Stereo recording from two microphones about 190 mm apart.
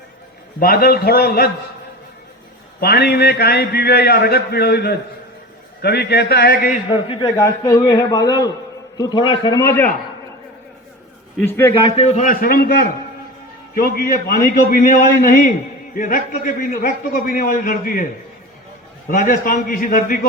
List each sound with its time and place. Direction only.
0.6 s a man's voice: 50° left (ahead or behind)
2.8 s a man's voice: 55° left (ahead or behind)
6.9 s a man's voice: 25° left (ahead or behind)
11.3 s a man's voice: 10° left (ahead or behind)
11.7 s a man's voice: 25° left (ahead or behind); by 18.0 s 45° left (ahead or behind)
19.1 s a man's voice: 45° left (ahead or behind)